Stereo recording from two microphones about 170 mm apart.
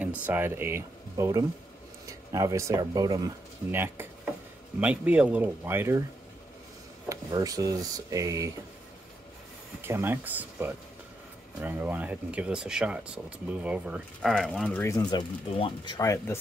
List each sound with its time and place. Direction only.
0.0 s speech: 10° right (ahead or behind)
7.1 s speech: 20° right (ahead or behind)
9.8 s speech: 15° right (ahead or behind); by 15.0 s 10° left (ahead or behind)
15.0 s speech: 30° left (ahead or behind)